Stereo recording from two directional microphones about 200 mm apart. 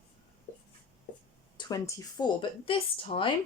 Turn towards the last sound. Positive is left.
turn(degrees=25)  # may be behind; listen again after turning